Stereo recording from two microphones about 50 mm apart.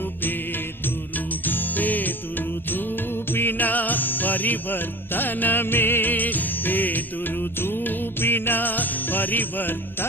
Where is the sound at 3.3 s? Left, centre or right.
Left.